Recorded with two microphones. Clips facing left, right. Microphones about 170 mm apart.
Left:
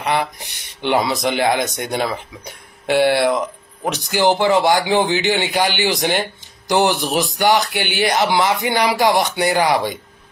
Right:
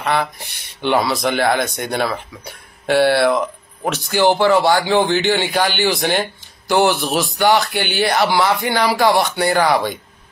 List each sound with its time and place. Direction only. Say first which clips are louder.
0.0 s speech: even; 15° left (ahead or behind)